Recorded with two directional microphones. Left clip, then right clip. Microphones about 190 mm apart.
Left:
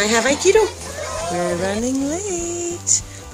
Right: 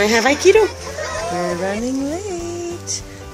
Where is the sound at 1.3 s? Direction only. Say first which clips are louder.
Left 2 dB; 5° left (ahead or behind).